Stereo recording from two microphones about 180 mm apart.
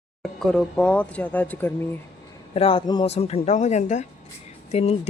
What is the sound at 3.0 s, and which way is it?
Speech, 35° left (ahead or behind).